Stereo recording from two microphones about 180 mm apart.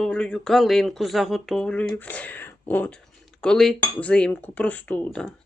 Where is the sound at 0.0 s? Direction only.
5° left (ahead or behind).